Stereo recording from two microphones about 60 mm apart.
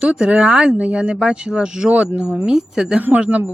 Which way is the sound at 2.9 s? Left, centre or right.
Right.